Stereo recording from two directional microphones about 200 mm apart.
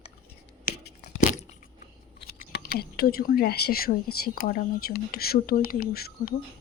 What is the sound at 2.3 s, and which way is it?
Speech, 50° left (ahead or behind).